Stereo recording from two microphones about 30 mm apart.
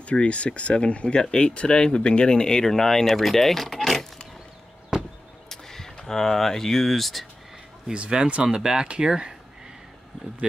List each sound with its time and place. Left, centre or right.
0.0 s speech: left
2.3 s speech: left
3.2 s speech: centre
5.5 s speech: centre
7.9 s speech: right